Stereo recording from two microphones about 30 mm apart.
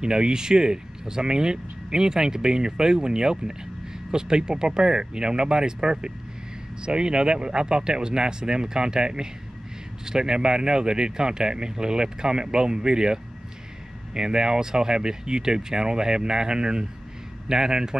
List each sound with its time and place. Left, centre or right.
0.0 s speech: right